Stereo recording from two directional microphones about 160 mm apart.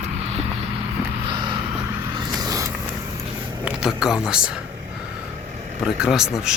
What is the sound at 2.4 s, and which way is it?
Vehicle, 25° right (ahead or behind).